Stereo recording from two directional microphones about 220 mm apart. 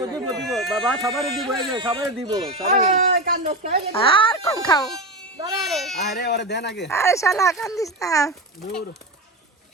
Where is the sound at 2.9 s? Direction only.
40° right (ahead or behind).